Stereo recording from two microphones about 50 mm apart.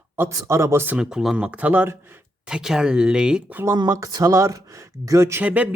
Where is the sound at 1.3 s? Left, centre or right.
Right.